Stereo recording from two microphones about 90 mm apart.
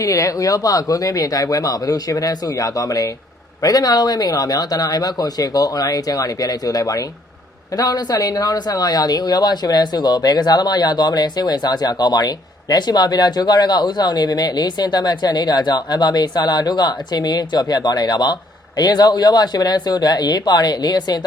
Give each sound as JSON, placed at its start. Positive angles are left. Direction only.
{"t": 0.0, "sound": "speech", "side_deg": 35}